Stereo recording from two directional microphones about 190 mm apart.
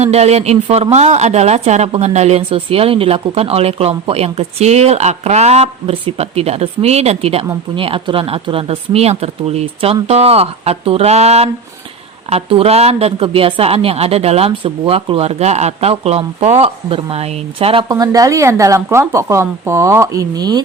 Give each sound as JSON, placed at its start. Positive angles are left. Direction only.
{"t": 0.0, "sound": "a woman's voice", "side_deg": -35}